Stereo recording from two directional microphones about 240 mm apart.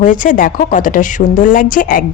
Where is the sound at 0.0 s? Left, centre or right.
Left.